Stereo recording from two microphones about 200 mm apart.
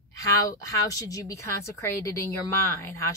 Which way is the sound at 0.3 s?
15° left (ahead or behind).